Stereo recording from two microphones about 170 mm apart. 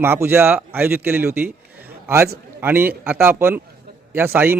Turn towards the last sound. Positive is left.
turn(degrees=-15)  # may be behind; listen again after turning